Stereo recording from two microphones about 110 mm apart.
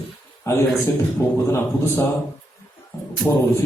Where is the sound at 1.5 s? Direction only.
20° left (ahead or behind).